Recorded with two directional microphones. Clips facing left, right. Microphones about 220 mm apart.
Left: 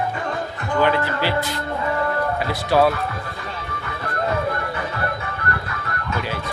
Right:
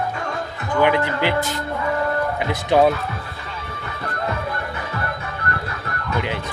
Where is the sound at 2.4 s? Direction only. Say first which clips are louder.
Right 2 dB; 20° right (ahead or behind).